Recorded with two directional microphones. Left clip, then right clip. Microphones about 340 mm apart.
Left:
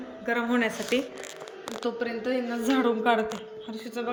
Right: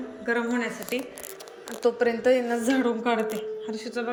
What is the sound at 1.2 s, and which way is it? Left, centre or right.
Speech, centre.